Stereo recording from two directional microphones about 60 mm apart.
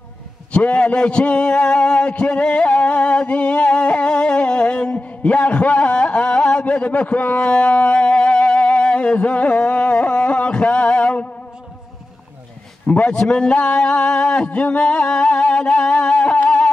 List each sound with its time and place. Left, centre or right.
0.5 s a man's voice: centre
12.8 s a man's voice: left
13.2 s a sound: centre